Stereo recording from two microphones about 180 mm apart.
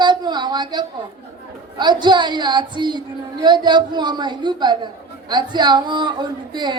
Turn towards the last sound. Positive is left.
turn(degrees=-25)  # may be behind; listen again after turning